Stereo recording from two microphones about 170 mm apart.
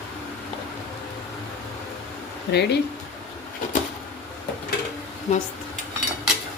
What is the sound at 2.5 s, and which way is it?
Speech, 80° left.